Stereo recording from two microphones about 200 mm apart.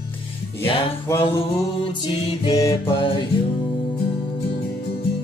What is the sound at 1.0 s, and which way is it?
Mantra, 10° left (ahead or behind).